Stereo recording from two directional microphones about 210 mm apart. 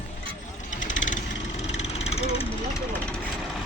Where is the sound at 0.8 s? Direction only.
35° left (ahead or behind).